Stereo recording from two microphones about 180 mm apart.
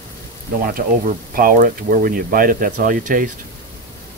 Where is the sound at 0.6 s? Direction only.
50° right (ahead or behind).